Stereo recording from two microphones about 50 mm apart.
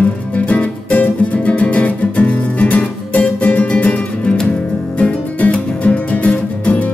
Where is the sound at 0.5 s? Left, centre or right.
Left.